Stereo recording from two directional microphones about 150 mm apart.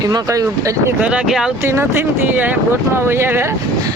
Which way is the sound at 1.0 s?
5° right (ahead or behind).